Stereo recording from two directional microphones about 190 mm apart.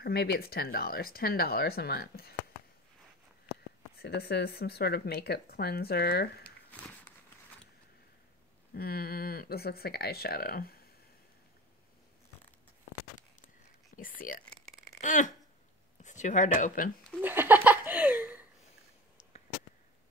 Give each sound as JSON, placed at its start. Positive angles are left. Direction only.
{"t": 0.0, "sound": "speech", "side_deg": 55}
{"t": 3.9, "sound": "speech", "side_deg": 55}
{"t": 8.7, "sound": "speech", "side_deg": 55}
{"t": 13.9, "sound": "speech", "side_deg": 45}
{"t": 14.4, "sound": "a sound", "side_deg": 0}
{"t": 15.0, "sound": "a sound", "side_deg": 40}
{"t": 16.0, "sound": "speech", "side_deg": 40}
{"t": 17.2, "sound": "laughter", "side_deg": -10}